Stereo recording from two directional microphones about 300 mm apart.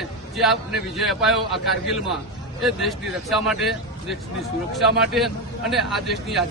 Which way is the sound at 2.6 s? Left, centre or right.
Centre.